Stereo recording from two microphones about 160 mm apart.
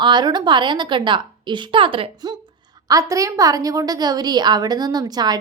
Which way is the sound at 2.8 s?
20° right (ahead or behind).